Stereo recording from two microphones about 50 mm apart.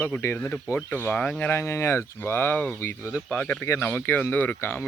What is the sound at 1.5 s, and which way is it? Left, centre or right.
Speech, left.